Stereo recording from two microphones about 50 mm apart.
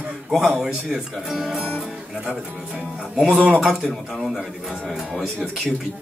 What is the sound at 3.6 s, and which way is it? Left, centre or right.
Speech, centre.